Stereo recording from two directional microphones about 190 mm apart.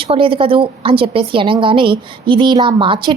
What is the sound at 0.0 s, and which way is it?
A woman's voice, 30° right (ahead or behind).